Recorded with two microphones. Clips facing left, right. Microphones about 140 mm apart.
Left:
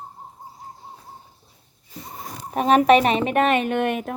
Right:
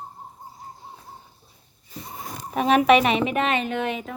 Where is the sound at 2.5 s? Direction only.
45° left (ahead or behind).